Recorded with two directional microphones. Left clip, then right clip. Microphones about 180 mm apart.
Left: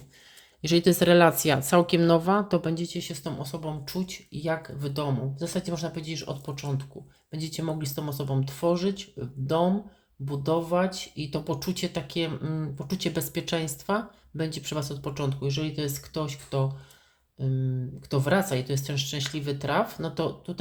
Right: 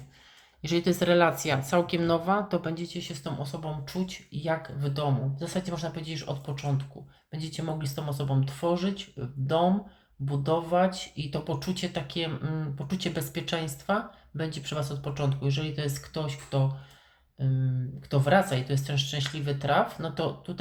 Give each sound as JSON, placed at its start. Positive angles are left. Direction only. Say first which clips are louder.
{"t": 0.6, "sound": "speech", "louder": "left 5 dB", "side_deg": 55}
{"t": 18.1, "sound": "speech", "louder": "right 1 dB", "side_deg": 45}